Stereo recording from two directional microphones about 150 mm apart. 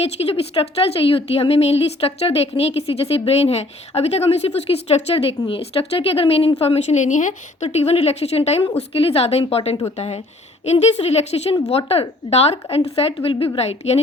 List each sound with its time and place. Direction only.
0.0 s a woman's voice: 40° left (ahead or behind)